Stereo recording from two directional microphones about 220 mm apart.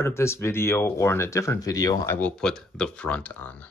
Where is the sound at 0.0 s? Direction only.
10° left (ahead or behind).